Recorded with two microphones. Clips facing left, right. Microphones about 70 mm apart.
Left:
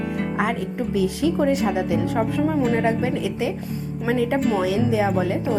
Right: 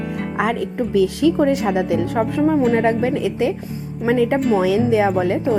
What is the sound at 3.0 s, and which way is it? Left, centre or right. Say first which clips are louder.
Speech: right 5 dB; right.